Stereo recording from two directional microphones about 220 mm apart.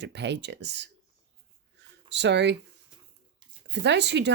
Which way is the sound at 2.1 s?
50° right (ahead or behind).